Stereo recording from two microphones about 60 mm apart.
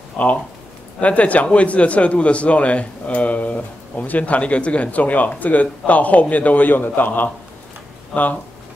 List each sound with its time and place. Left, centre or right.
0.2 s a man's voice: left